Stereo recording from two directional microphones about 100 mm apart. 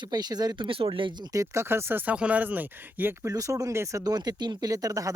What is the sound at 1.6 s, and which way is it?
Speech, 25° right (ahead or behind).